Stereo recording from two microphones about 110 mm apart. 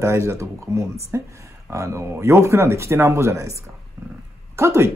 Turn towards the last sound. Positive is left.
turn(degrees=-25)  # may be behind; listen again after turning